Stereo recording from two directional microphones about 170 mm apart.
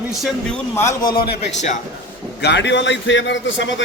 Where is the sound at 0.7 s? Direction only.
20° left (ahead or behind).